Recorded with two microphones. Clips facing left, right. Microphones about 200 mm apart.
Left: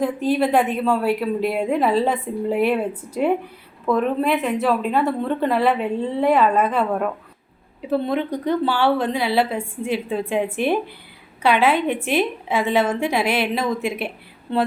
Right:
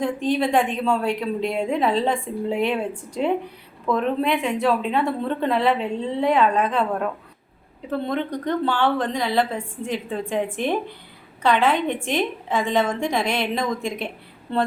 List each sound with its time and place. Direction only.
0.0 s a woman's voice: 5° left (ahead or behind)